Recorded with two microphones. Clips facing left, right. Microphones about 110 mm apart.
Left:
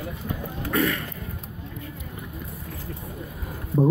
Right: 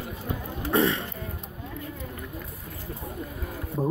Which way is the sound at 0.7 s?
30° right (ahead or behind).